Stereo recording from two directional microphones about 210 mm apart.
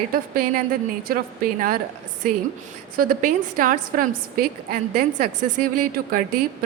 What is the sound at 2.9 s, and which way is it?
A woman's voice, 45° right (ahead or behind).